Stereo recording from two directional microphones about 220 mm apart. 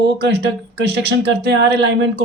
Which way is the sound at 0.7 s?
50° right (ahead or behind).